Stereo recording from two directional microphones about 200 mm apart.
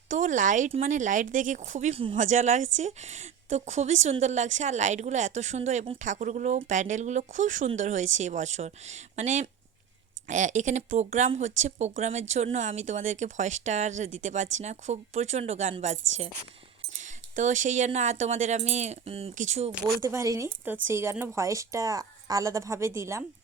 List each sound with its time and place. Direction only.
0.1 s speech: 40° right (ahead or behind)
17.0 s speech: 40° right (ahead or behind)
19.7 s a woman's voice: 15° right (ahead or behind)